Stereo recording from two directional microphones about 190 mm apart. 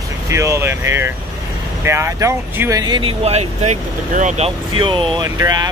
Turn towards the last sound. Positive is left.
turn(degrees=-20)  # may be behind; listen again after turning